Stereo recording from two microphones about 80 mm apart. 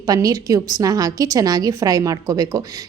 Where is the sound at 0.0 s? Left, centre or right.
Right.